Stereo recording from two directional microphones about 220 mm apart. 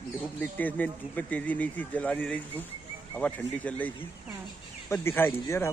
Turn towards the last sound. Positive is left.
turn(degrees=10)  # may be behind; listen again after turning